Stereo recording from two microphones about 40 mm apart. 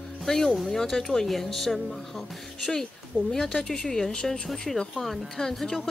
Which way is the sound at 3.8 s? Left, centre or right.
Centre.